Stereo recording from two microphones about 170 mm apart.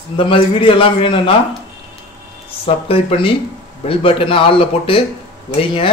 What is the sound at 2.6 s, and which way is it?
Speech, 35° left (ahead or behind).